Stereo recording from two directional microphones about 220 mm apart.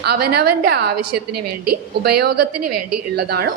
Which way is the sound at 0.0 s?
45° right (ahead or behind).